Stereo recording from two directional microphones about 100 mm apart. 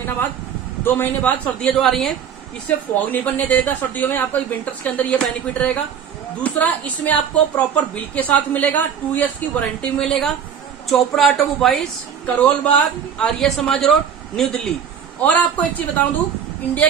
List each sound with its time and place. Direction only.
0.8 s a woman's voice: 20° left (ahead or behind)
1.8 s a man's voice: 5° left (ahead or behind)
2.7 s a woman's voice: 15° left (ahead or behind)
12.3 s a man's voice: 15° left (ahead or behind)
15.2 s a woman's voice: 15° left (ahead or behind)